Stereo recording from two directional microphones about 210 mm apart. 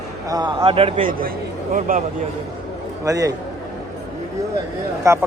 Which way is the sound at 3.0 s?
15° right (ahead or behind).